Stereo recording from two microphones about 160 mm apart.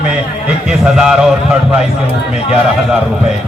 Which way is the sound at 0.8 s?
5° right (ahead or behind).